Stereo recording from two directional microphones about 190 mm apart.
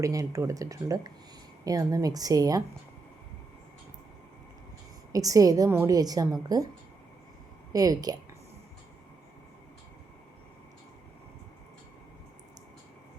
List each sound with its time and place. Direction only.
0.0 s a woman's voice: 15° right (ahead or behind)
5.1 s a woman's voice: 20° right (ahead or behind)
7.7 s a woman's voice: 20° right (ahead or behind)